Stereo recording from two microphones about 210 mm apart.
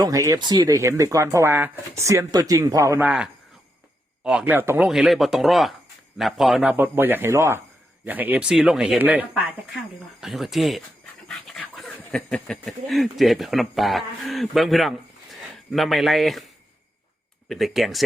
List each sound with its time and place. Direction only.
0.0 s speech: 15° right (ahead or behind); by 16.4 s centre (ahead or behind)
17.5 s speech: centre (ahead or behind)